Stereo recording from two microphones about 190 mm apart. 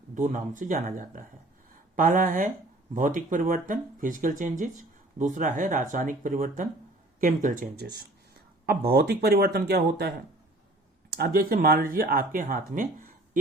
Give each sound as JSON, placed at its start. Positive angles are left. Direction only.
{"t": 0.1, "sound": "speech", "side_deg": -40}
{"t": 11.2, "sound": "speech", "side_deg": -50}